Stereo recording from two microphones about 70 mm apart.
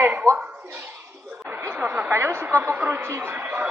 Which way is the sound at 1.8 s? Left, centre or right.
Right.